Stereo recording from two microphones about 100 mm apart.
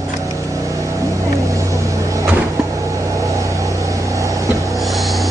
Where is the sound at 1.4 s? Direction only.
30° right (ahead or behind).